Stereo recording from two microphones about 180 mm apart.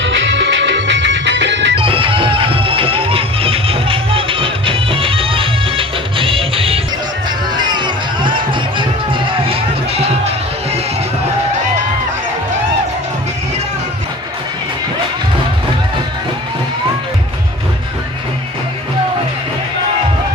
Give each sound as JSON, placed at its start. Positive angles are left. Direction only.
{"t": 0.0, "sound": "music", "side_deg": -90}
{"t": 1.8, "sound": "music", "side_deg": -30}